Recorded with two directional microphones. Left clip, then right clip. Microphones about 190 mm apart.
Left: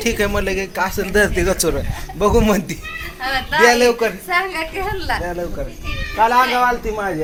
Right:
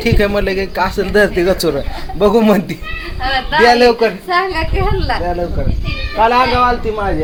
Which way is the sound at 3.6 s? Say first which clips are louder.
Right 4 dB; centre (ahead or behind).